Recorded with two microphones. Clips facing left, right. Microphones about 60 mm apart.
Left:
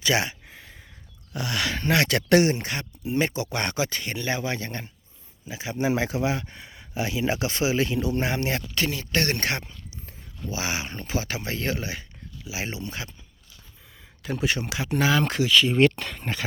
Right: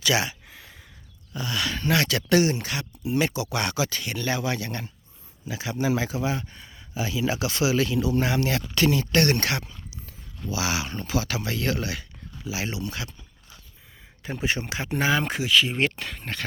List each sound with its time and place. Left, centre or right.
0.0 s a sound: left
1.3 s speech: left; by 5.7 s centre
5.7 s speech: left
8.7 s speech: centre
9.4 s speech: left
14.2 s speech: right
15.2 s speech: centre